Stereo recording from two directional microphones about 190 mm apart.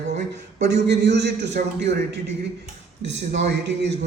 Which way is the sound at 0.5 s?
65° right (ahead or behind).